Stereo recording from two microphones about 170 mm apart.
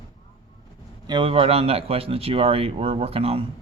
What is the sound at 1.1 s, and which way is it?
A man's voice, 30° right (ahead or behind).